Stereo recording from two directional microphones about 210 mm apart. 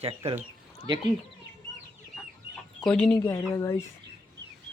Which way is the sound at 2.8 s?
5° left (ahead or behind).